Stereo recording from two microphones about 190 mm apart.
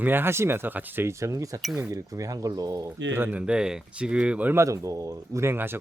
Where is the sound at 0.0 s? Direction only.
10° right (ahead or behind).